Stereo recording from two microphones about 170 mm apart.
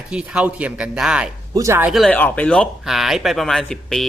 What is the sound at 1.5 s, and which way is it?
Speech, 15° right (ahead or behind).